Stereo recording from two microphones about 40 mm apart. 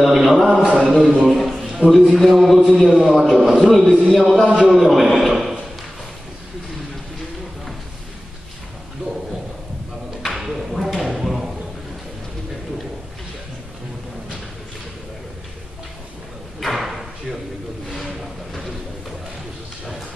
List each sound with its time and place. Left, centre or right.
0.0 s a man's voice: centre
0.5 s mantra: centre
0.9 s a sound: centre
1.8 s speech: right
2.1 s a man's voice: centre
4.2 s a man's voice: centre
10.3 s a sound: centre
16.5 s thump: centre